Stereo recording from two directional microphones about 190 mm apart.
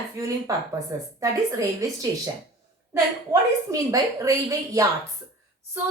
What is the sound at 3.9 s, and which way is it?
Speech, 20° right (ahead or behind).